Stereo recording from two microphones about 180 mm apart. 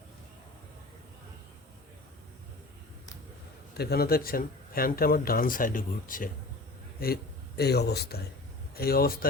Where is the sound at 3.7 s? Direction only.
65° left (ahead or behind).